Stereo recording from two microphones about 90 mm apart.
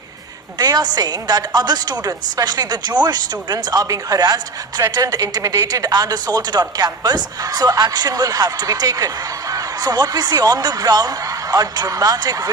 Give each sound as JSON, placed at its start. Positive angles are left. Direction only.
{"t": 0.6, "sound": "speech", "side_deg": -50}